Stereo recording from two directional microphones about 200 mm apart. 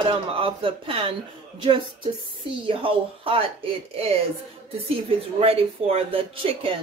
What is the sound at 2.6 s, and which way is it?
Speech, 25° right (ahead or behind).